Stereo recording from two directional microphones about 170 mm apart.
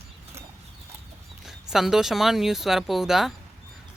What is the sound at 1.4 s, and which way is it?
Speech, centre (ahead or behind).